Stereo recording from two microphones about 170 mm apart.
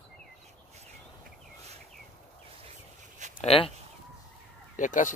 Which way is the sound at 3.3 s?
35° left (ahead or behind).